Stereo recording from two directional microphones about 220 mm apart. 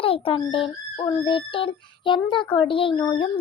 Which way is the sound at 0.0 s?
25° left (ahead or behind).